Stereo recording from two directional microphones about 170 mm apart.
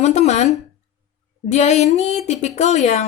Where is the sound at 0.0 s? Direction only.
40° left (ahead or behind).